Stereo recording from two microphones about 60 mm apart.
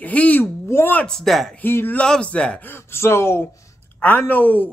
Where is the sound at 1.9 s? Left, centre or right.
Centre.